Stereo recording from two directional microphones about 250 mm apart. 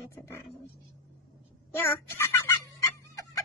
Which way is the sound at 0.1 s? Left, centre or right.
Centre.